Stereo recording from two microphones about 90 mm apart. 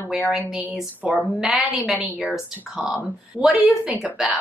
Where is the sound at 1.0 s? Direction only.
5° right (ahead or behind).